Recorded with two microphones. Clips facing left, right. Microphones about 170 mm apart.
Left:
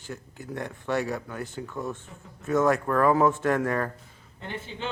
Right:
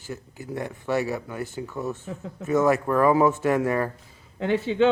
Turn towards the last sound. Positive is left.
turn(degrees=-75)  # may be behind; listen again after turning